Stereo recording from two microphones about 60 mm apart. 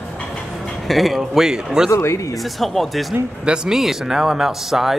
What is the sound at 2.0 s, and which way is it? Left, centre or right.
Speech, left.